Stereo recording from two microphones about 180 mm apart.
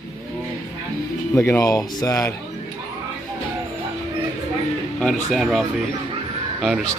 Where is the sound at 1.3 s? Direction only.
15° left (ahead or behind).